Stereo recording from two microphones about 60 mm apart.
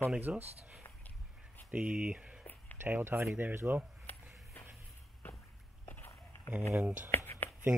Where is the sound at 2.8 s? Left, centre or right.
Right.